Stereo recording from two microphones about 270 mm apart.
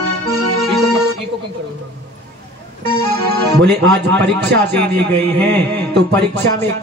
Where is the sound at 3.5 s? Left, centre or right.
Right.